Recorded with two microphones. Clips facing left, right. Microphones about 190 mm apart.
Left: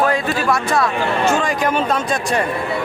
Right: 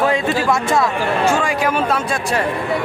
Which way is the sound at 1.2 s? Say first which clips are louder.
Even; 10° right (ahead or behind).